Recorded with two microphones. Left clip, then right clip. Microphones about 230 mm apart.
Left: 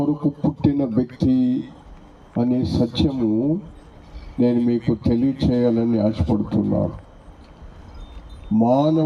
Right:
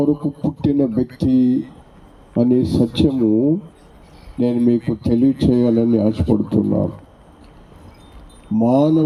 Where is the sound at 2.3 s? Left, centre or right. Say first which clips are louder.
Right 5 dB; right.